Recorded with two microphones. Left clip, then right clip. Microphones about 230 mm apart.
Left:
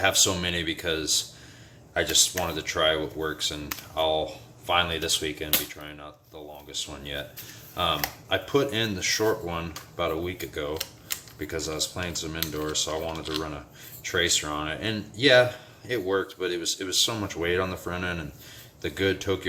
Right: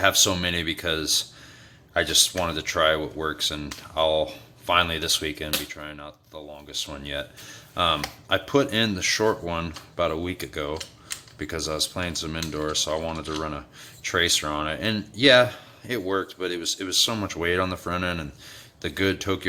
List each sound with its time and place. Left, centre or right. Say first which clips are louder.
0.0 s speech: right 3 dB; right